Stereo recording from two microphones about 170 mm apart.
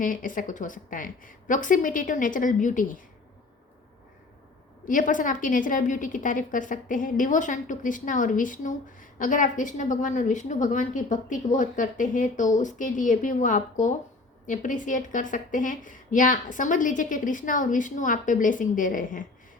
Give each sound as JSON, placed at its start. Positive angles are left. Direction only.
{"t": 0.0, "sound": "a woman's voice", "side_deg": 55}
{"t": 4.9, "sound": "a woman's voice", "side_deg": 50}